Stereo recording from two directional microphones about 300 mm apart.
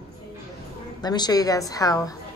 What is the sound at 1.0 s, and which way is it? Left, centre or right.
A woman's voice, centre.